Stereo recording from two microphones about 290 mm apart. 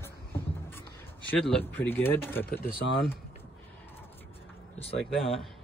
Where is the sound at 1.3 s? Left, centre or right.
Centre.